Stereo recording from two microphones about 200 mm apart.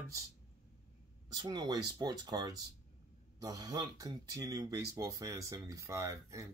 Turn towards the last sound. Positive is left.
turn(degrees=-15)  # may be behind; listen again after turning